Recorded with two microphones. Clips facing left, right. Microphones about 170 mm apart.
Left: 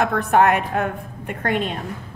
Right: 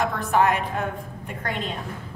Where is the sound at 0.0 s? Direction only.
60° left (ahead or behind).